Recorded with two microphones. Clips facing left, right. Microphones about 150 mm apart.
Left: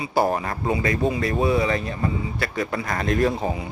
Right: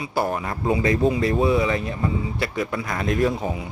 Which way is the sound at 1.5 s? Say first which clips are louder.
Right 1 dB; 20° right (ahead or behind).